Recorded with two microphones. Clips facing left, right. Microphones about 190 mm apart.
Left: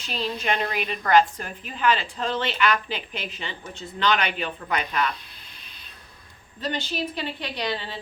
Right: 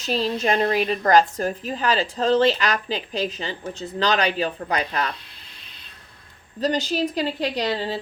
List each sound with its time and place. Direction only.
0.0 s a woman's voice: 40° right (ahead or behind)
6.6 s a woman's voice: 40° right (ahead or behind)